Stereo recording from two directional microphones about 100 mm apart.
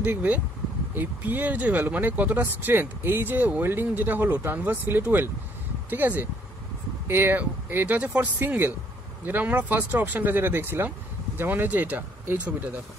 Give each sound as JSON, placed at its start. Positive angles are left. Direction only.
{"t": 0.0, "sound": "speech", "side_deg": -15}